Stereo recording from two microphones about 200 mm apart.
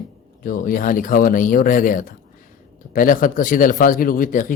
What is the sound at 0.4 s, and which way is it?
Speech, 45° left (ahead or behind).